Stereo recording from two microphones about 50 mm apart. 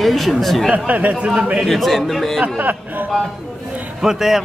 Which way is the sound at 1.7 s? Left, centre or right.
Centre.